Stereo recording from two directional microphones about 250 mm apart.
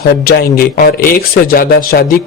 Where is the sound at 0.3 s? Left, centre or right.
Left.